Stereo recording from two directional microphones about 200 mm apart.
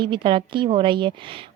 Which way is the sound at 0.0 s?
25° right (ahead or behind).